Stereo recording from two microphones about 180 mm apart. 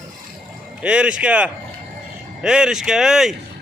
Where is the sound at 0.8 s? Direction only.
5° right (ahead or behind).